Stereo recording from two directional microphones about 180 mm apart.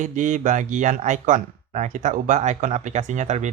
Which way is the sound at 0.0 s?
45° right (ahead or behind).